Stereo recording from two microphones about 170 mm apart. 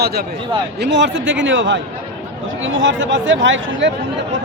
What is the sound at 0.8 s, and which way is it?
Speech, 90° right.